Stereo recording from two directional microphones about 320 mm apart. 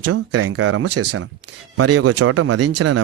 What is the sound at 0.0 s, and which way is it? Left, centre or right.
Speech, right.